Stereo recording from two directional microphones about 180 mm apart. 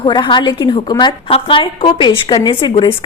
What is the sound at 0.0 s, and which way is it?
A woman's voice, 25° left (ahead or behind).